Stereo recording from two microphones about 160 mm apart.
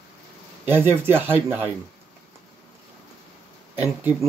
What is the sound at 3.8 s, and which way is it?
Speech, 10° right (ahead or behind).